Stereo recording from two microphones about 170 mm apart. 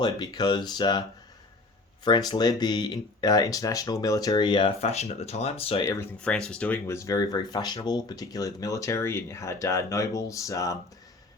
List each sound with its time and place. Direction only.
0.0 s speech: 25° left (ahead or behind)
2.0 s speech: 25° left (ahead or behind)
5.8 s speech: 20° left (ahead or behind)
6.2 s speech: 5° left (ahead or behind)